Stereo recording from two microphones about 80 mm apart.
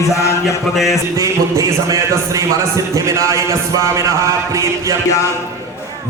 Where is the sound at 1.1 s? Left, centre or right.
Right.